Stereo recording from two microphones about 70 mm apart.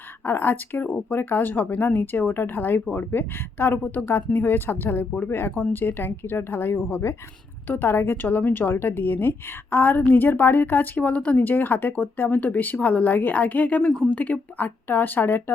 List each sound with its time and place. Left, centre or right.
0.3 s a woman's voice: left
7.7 s speech: left
13.8 s speech: centre
14.1 s speech: left